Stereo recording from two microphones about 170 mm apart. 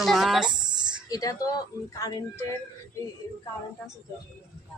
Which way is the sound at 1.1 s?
20° left (ahead or behind).